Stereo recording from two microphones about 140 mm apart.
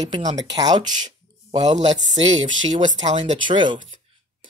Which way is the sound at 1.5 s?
55° right (ahead or behind).